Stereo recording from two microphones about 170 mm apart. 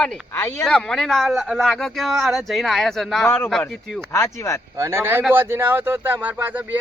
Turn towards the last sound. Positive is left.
turn(degrees=-10)  # may be behind; listen again after turning